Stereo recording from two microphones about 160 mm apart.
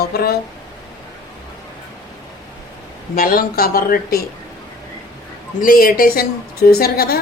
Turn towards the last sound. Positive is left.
turn(degrees=75)  # may be behind; listen again after turning